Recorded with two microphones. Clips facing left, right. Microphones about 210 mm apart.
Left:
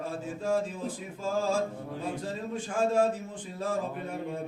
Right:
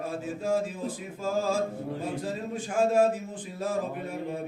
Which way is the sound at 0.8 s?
40° right (ahead or behind).